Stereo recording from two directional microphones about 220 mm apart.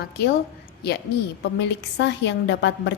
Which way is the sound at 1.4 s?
50° left (ahead or behind).